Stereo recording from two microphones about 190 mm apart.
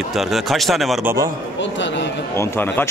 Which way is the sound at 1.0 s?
20° right (ahead or behind).